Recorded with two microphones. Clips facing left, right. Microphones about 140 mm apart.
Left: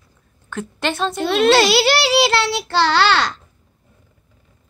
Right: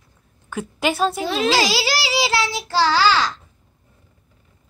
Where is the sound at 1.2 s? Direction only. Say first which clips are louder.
Left 9 dB; 70° left (ahead or behind).